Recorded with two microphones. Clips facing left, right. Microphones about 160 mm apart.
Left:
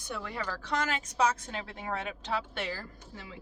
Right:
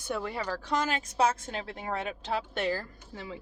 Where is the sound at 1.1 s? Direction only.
30° right (ahead or behind).